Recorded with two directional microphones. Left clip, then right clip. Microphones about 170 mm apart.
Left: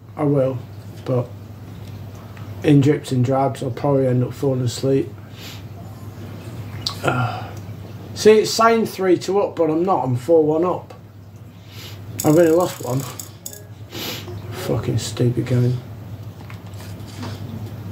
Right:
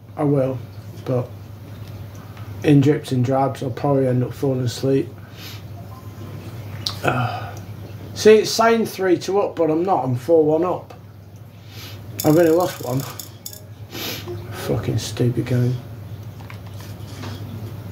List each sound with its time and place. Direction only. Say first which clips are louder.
0.1 s speech: left 1 dB; centre (ahead or behind)
2.6 s speech: even; centre (ahead or behind)
6.8 s a sound: even; centre (ahead or behind)
8.1 s speech: even; centre (ahead or behind)
12.2 s speech: left 1 dB; 5° left (ahead or behind)
13.9 s a sound: even; centre (ahead or behind)